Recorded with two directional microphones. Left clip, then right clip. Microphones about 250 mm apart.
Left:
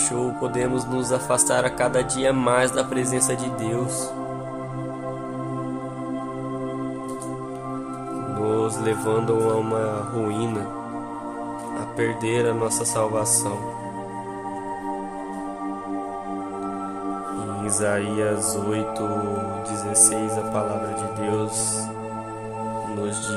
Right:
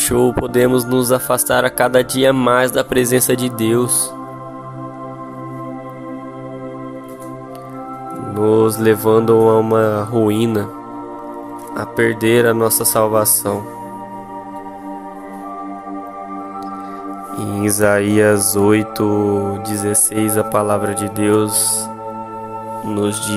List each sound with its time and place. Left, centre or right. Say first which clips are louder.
0.1 s speech: right 10 dB; right
8.4 s speech: right 11 dB; right
11.8 s speech: right 10 dB; right
17.6 s speech: right 10 dB; right